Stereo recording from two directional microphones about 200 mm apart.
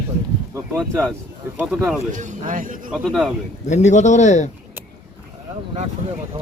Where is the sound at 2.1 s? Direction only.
40° right (ahead or behind).